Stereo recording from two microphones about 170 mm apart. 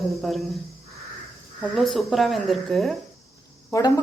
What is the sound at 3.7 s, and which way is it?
Speech, 20° left (ahead or behind).